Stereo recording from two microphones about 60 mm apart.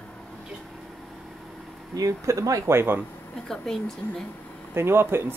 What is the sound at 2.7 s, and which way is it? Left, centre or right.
Speech, right.